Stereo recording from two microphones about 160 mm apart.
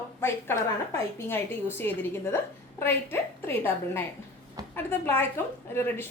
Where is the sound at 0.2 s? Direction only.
15° left (ahead or behind).